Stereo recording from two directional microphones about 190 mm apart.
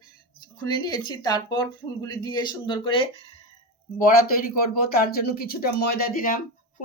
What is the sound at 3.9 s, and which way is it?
Speech, 50° left (ahead or behind).